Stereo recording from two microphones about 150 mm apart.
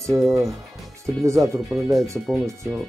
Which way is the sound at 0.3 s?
20° right (ahead or behind).